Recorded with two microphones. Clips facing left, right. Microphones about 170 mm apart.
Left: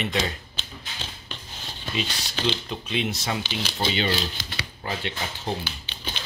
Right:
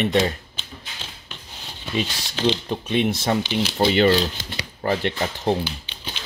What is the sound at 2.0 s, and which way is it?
Speech, 45° right (ahead or behind).